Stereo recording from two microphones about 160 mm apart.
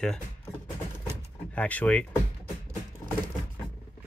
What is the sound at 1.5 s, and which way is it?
Speech, 10° left (ahead or behind).